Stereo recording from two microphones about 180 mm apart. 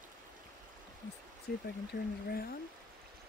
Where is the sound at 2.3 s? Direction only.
60° left (ahead or behind).